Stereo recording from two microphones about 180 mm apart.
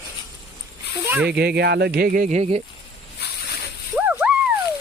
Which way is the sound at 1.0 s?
10° right (ahead or behind).